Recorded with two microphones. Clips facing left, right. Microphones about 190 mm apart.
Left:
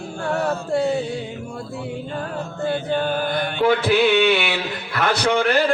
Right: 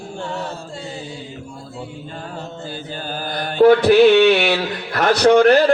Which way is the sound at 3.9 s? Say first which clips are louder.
Right 6 dB; 45° right (ahead or behind).